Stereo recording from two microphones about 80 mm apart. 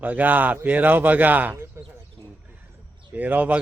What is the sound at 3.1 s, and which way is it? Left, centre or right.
Speech, right.